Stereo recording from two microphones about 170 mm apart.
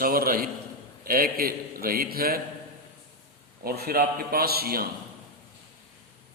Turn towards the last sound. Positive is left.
turn(degrees=-60)  # may be behind; listen again after turning